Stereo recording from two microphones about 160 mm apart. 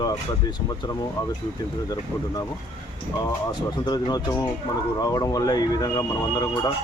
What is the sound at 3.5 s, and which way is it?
Speech, 25° left (ahead or behind).